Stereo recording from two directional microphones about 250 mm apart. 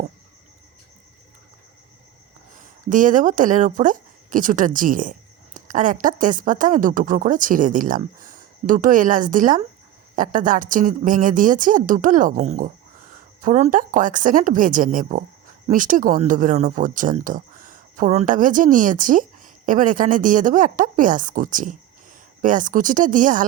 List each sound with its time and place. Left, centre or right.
2.6 s a woman's voice: right